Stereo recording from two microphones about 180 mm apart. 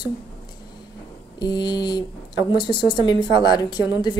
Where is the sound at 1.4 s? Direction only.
25° left (ahead or behind).